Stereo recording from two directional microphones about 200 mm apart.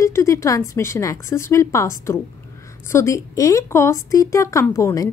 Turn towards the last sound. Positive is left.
turn(degrees=15)  # may be behind; listen again after turning